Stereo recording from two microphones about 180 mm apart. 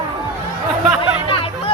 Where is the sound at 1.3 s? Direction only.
30° left (ahead or behind).